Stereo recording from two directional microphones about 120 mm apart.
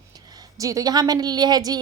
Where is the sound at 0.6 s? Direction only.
30° right (ahead or behind).